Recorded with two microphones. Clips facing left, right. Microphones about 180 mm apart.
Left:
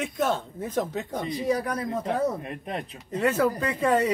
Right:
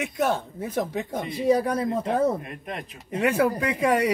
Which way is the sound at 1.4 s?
30° right (ahead or behind).